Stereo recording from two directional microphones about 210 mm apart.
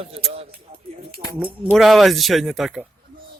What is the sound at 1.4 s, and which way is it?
Speech, 5° right (ahead or behind).